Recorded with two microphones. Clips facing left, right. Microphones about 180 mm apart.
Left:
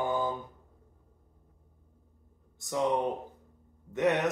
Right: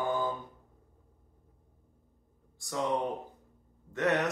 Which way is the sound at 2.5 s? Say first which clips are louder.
Left 3 dB; 20° left (ahead or behind).